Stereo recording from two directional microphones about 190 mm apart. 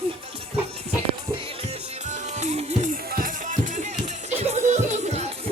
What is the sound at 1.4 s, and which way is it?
Music, 35° right (ahead or behind).